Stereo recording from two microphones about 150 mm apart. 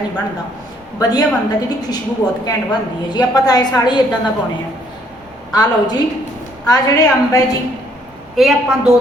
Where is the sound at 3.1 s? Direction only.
25° left (ahead or behind).